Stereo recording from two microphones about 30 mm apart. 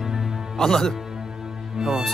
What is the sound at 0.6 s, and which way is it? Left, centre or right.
Speech, centre.